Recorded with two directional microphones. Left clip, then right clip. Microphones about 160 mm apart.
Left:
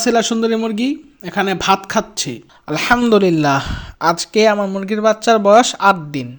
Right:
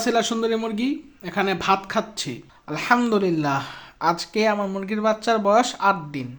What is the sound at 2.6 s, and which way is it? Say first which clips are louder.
Speech: left 6 dB; 55° left (ahead or behind).